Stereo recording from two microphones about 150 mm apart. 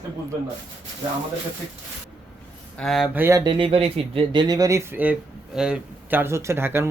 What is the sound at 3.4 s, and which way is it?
Speech, 35° right (ahead or behind).